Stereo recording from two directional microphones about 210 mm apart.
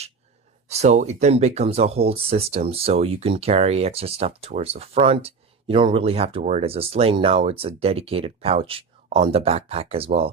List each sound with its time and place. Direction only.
0.7 s speech: 30° right (ahead or behind)